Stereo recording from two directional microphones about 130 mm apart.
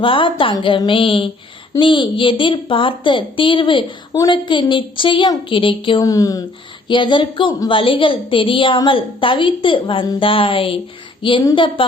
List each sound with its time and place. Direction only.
0.0 s a woman's voice: 40° left (ahead or behind)
6.0 s speech: 25° left (ahead or behind)
6.8 s a woman's voice: 40° left (ahead or behind)
10.2 s music: 45° left (ahead or behind)
11.2 s a woman's voice: 35° left (ahead or behind)